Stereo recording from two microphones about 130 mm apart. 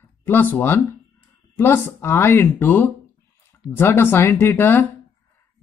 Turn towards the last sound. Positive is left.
turn(degrees=20)  # may be behind; listen again after turning